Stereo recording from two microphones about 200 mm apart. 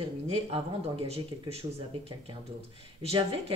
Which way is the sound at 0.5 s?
30° right (ahead or behind).